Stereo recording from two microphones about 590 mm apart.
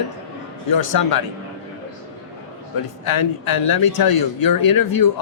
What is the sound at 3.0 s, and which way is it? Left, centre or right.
Speech, left.